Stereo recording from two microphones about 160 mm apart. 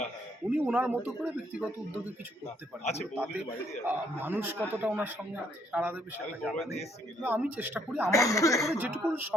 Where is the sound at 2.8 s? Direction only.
45° left (ahead or behind).